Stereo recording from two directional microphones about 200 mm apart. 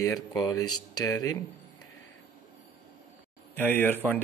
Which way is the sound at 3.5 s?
10° left (ahead or behind).